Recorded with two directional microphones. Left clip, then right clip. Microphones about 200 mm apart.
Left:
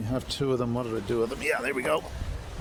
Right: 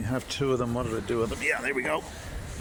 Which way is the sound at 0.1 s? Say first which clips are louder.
Even; 10° left (ahead or behind).